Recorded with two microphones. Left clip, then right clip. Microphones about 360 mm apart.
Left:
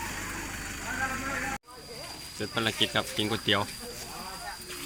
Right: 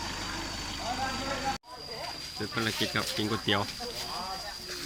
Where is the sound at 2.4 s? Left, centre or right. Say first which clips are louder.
Left 3 dB; centre.